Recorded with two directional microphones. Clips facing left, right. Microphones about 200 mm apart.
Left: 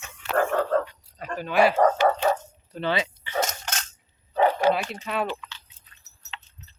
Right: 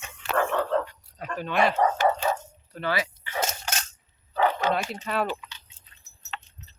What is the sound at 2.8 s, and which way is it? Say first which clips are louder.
Speech: left 2 dB; 25° left (ahead or behind).